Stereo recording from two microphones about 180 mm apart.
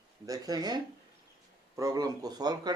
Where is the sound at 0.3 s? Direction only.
20° right (ahead or behind).